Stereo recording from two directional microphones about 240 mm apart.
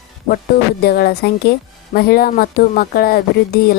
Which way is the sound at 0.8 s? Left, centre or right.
Left.